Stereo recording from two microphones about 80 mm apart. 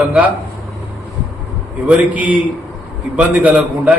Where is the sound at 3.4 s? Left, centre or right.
Centre.